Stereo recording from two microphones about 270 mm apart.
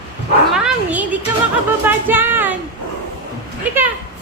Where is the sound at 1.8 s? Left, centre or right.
Centre.